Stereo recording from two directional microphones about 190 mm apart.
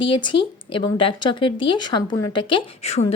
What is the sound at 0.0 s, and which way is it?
A woman's voice, 25° left (ahead or behind).